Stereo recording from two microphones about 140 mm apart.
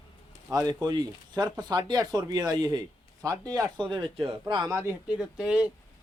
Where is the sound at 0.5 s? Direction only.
25° right (ahead or behind).